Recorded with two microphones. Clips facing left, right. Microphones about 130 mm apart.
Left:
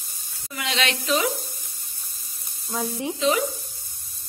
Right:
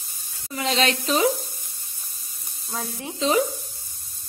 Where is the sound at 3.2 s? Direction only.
35° right (ahead or behind).